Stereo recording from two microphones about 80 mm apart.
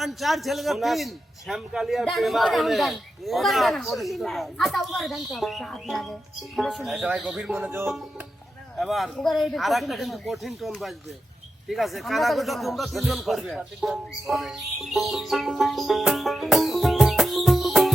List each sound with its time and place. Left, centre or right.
0.0 s a man's voice: centre
7.5 s speech: right
8.8 s a man's voice: centre
13.8 s music: centre